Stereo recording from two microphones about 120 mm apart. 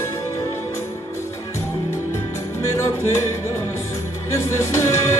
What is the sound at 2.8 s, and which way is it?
Music, 25° left (ahead or behind).